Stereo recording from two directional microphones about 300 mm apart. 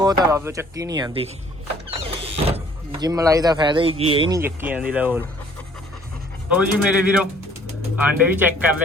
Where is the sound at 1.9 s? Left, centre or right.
Centre.